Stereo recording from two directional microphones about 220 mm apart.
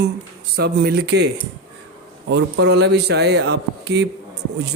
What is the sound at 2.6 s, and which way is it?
A man's voice, 50° right (ahead or behind).